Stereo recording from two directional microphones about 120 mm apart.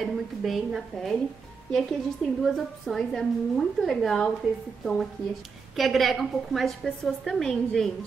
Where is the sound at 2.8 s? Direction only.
Centre (ahead or behind).